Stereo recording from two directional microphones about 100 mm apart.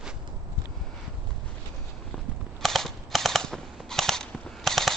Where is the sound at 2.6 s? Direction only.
Centre (ahead or behind).